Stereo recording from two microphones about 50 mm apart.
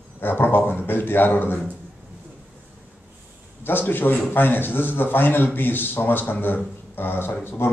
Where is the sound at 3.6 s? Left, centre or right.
Left.